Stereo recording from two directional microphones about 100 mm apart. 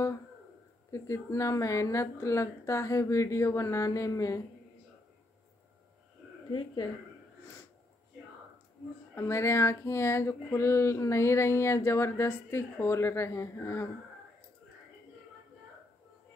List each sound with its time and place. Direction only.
0.9 s a woman's voice: 30° left (ahead or behind)
6.5 s speech: 50° left (ahead or behind)
9.1 s a sound: 25° left (ahead or behind)